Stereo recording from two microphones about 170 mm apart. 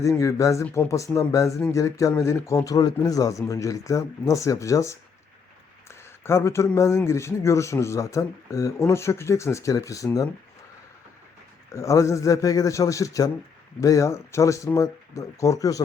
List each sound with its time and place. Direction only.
0.0 s speech: 20° left (ahead or behind)
11.7 s speech: 15° left (ahead or behind)